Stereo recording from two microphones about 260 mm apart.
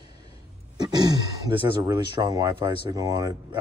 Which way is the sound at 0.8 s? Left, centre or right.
Centre.